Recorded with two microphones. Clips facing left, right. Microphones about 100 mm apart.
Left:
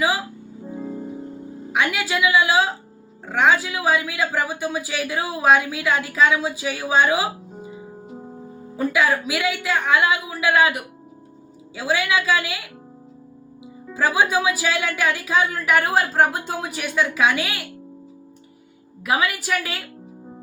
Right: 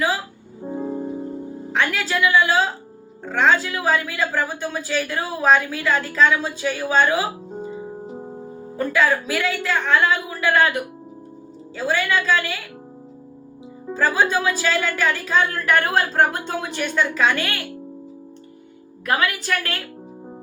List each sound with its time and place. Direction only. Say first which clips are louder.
0.6 s music: right 5 dB; 35° right (ahead or behind)
1.7 s a woman's voice: even; 10° left (ahead or behind)
8.7 s a woman's voice: right 1 dB; 10° left (ahead or behind)
13.9 s a woman's voice: even; 10° left (ahead or behind)
19.0 s a woman's voice: even; 5° left (ahead or behind)